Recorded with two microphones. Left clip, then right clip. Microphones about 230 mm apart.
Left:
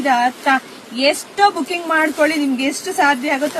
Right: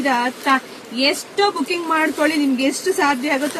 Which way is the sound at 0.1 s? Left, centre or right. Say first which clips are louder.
Left 4 dB; centre.